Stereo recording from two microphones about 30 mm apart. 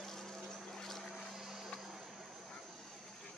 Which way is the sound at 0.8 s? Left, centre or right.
Centre.